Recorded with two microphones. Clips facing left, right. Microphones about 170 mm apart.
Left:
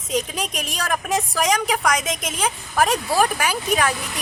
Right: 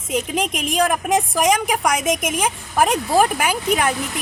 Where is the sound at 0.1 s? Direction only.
55° right (ahead or behind).